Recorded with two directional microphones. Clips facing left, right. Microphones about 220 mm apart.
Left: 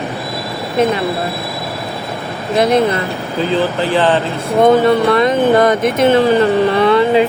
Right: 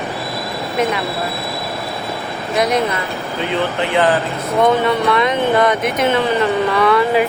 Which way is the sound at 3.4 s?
35° left (ahead or behind).